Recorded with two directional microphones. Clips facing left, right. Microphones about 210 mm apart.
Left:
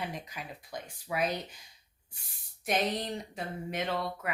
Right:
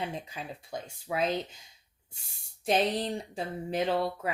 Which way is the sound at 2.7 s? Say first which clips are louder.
Right 4 dB; 30° right (ahead or behind).